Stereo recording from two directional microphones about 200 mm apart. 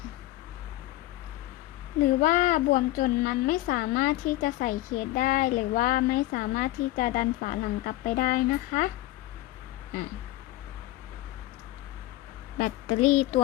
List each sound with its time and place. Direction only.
2.2 s a woman's voice: 40° left (ahead or behind)
12.5 s speech: 40° left (ahead or behind)